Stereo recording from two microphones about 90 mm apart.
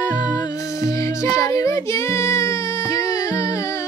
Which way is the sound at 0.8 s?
35° left (ahead or behind).